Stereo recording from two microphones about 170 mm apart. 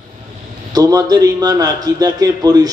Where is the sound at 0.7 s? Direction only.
20° right (ahead or behind).